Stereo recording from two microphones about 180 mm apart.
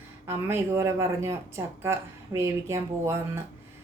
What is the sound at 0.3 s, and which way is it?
Speech, 15° right (ahead or behind).